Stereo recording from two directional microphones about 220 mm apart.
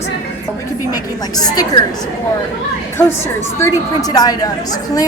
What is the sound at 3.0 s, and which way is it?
A woman's voice, 10° left (ahead or behind).